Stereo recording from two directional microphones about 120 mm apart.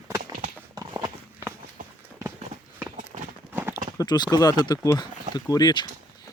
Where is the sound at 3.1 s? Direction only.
65° right (ahead or behind).